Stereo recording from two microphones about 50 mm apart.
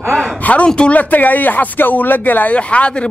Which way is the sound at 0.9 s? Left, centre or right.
Left.